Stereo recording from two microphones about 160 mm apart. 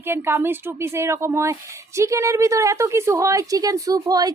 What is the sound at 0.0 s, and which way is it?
A woman's voice, 15° right (ahead or behind).